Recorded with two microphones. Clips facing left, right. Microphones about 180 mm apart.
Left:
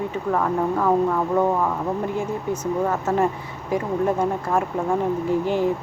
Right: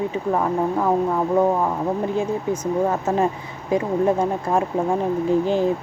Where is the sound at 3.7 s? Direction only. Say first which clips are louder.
Right 3 dB; 20° right (ahead or behind).